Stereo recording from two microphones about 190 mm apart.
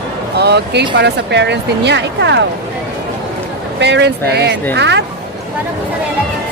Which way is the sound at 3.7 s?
65° right (ahead or behind).